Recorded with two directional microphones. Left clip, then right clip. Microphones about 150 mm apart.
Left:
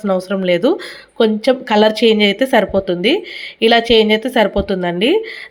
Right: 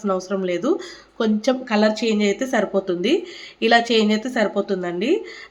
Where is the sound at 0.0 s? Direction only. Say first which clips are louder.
Left 6 dB; 35° left (ahead or behind).